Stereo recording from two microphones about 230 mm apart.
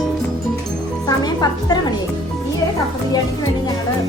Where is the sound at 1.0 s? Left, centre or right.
Centre.